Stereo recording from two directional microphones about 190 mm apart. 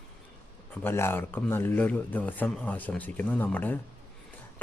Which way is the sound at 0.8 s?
10° left (ahead or behind).